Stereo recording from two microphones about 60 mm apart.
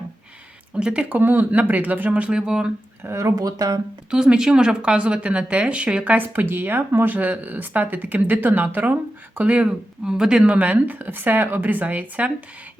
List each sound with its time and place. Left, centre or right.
0.7 s speech: centre
1.1 s speech: right; by 2.7 s centre
3.2 s speech: right
4.1 s speech: centre
6.1 s speech: right; by 10.4 s centre
10.4 s speech: right